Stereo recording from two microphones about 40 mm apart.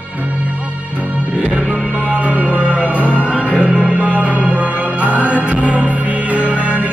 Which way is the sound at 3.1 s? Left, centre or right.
Left.